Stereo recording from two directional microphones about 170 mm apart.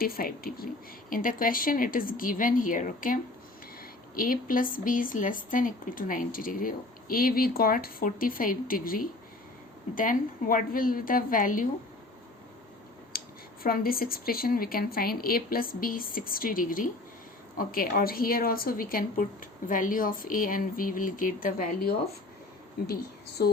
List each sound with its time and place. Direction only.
0.0 s speech: 60° left (ahead or behind)
13.1 s speech: 60° left (ahead or behind)